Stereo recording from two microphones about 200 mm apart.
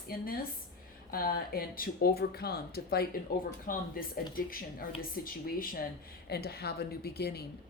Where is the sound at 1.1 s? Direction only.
50° left (ahead or behind).